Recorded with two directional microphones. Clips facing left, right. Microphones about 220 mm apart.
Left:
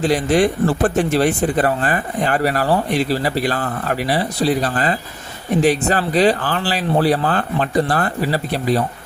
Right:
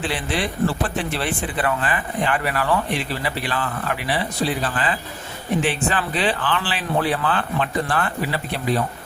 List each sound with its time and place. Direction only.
0.0 s speech: 40° left (ahead or behind)